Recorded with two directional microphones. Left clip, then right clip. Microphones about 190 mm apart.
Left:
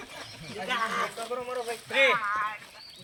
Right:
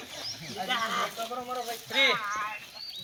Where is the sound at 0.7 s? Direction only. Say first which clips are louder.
Left 1 dB; 40° left (ahead or behind).